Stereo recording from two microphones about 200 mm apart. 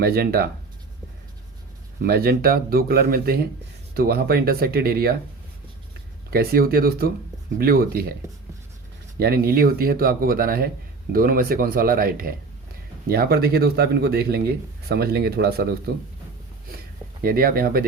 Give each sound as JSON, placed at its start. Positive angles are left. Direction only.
{"t": 0.0, "sound": "speech", "side_deg": -50}
{"t": 2.0, "sound": "speech", "side_deg": -50}
{"t": 6.3, "sound": "speech", "side_deg": -50}
{"t": 9.1, "sound": "speech", "side_deg": -50}
{"t": 17.2, "sound": "speech", "side_deg": -45}